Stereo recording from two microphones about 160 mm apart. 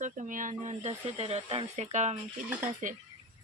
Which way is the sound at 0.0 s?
55° right (ahead or behind).